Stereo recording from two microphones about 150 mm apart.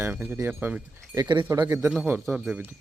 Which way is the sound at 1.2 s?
25° right (ahead or behind).